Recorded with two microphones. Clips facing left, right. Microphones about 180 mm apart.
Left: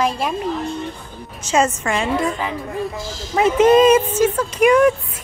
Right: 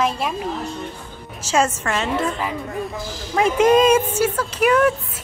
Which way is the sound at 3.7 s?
10° left (ahead or behind).